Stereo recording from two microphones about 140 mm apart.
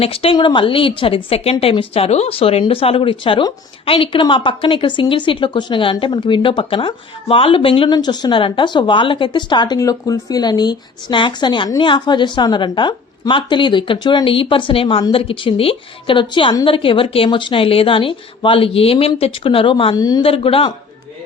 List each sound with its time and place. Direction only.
0.0 s speech: 40° left (ahead or behind)
20.2 s speech: 40° left (ahead or behind)